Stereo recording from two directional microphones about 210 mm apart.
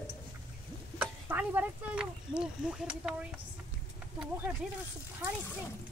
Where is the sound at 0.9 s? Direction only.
5° right (ahead or behind).